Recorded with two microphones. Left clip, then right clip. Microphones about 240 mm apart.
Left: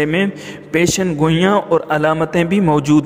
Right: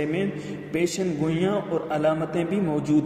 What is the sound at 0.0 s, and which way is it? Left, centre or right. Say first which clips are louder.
A man's voice: left 9 dB; left.